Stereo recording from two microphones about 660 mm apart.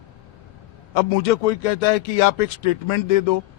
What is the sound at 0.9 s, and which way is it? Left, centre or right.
A man's voice, left.